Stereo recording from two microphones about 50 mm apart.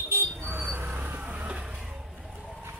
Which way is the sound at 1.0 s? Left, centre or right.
Right.